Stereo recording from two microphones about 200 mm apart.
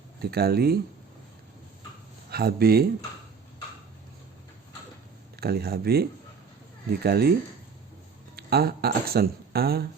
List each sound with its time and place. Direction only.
0.2 s speech: 50° right (ahead or behind)
2.3 s speech: 50° right (ahead or behind)
5.4 s speech: 50° right (ahead or behind)
8.4 s speech: 50° right (ahead or behind)